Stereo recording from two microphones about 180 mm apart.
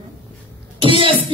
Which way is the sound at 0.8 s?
30° right (ahead or behind).